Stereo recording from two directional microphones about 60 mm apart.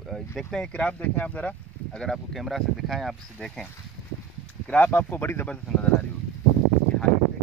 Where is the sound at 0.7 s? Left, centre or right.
Left.